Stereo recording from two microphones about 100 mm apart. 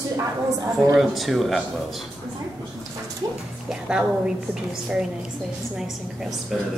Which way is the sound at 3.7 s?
10° right (ahead or behind).